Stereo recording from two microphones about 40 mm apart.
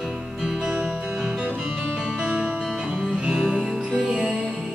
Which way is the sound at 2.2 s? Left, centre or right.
Right.